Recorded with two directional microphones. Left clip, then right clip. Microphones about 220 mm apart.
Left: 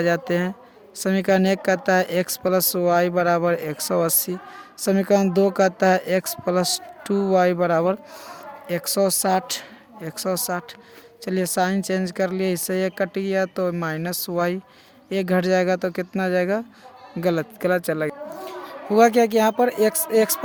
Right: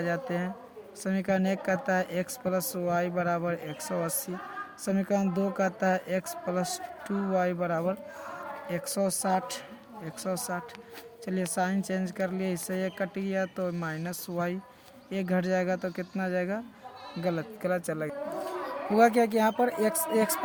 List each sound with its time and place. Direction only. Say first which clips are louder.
0.0 s speech: left 10 dB; 50° left (ahead or behind)